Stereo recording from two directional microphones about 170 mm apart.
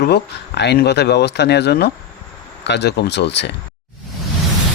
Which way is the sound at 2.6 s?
90° left.